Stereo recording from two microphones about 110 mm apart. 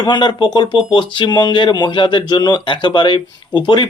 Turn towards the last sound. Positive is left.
turn(degrees=45)  # may be behind; listen again after turning